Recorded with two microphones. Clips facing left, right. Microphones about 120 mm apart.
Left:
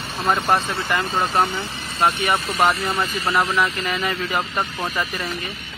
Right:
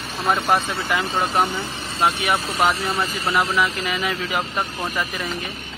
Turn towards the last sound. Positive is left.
turn(degrees=15)  # may be behind; listen again after turning